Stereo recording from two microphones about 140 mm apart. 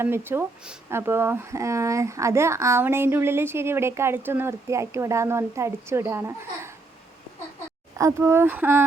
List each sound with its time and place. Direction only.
0.0 s speech: 15° right (ahead or behind)
7.9 s speech: 20° right (ahead or behind)